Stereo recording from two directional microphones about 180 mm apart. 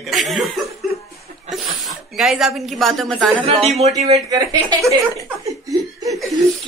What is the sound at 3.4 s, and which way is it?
Speech, 35° right (ahead or behind).